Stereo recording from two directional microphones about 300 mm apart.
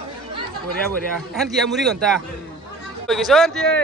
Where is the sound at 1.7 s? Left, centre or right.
Centre.